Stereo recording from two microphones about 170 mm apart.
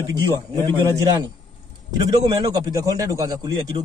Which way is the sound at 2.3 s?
25° right (ahead or behind).